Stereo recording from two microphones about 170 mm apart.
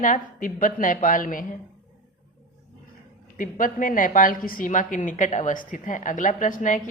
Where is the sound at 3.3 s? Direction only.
50° left (ahead or behind).